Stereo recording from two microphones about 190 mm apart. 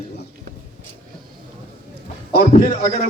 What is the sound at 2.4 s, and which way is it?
Speech, 35° left (ahead or behind).